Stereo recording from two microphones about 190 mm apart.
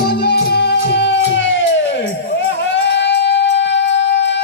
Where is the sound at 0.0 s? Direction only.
60° left (ahead or behind); by 1.6 s 75° left (ahead or behind).